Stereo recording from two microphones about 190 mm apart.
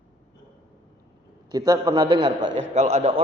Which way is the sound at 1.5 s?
20° right (ahead or behind).